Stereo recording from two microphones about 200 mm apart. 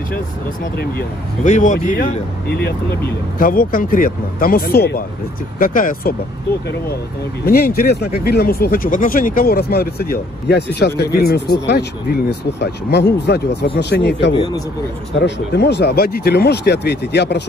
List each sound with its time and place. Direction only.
0.7 s speech: 45° left (ahead or behind)
3.3 s speech: 45° left (ahead or behind)
7.4 s speech: 50° left (ahead or behind)